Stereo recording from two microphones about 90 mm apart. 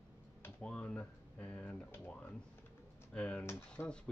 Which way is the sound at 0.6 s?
10° left (ahead or behind).